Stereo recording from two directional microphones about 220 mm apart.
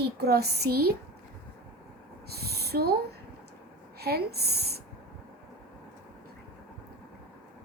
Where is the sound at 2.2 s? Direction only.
45° right (ahead or behind).